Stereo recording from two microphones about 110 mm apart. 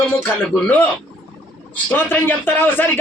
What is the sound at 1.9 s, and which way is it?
A man's voice, 20° left (ahead or behind).